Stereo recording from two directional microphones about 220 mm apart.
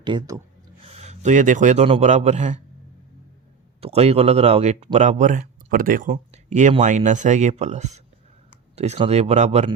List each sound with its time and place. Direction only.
0.0 s speech: 20° right (ahead or behind)
3.8 s speech: 25° right (ahead or behind)